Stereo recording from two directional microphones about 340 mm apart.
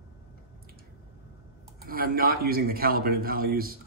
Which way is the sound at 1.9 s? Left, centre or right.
Right.